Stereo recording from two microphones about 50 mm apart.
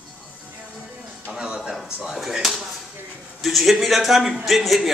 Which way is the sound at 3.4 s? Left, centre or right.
Centre.